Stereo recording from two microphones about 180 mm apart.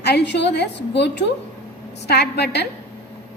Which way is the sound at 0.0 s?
65° left (ahead or behind).